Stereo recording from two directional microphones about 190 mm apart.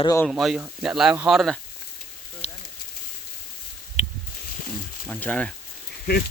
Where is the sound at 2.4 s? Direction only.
35° left (ahead or behind).